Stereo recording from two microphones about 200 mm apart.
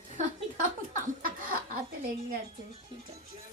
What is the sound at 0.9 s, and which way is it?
Laughter, 45° right (ahead or behind).